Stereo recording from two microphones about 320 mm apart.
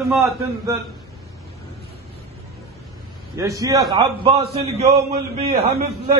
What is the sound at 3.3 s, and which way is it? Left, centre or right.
A man's voice, centre.